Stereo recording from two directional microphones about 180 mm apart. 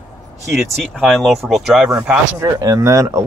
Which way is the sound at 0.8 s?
Centre (ahead or behind).